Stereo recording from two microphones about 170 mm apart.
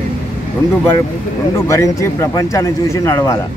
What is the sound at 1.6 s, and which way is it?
Speech, 15° left (ahead or behind).